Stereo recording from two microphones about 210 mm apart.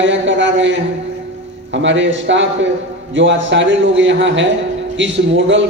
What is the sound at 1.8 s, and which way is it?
A man's voice, 60° right (ahead or behind).